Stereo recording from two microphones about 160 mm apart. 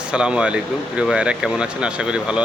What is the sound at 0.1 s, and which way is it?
Speech, 5° right (ahead or behind).